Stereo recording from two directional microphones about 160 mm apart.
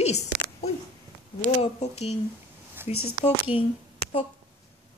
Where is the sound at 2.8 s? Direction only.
15° right (ahead or behind).